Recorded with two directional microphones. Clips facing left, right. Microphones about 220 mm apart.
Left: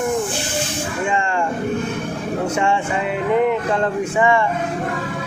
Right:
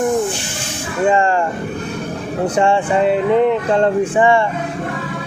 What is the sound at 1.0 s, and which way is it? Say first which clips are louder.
Vehicle: right 9 dB; 40° right (ahead or behind).